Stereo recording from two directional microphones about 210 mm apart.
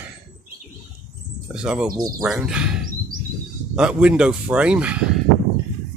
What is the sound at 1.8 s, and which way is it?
Speech, 20° right (ahead or behind).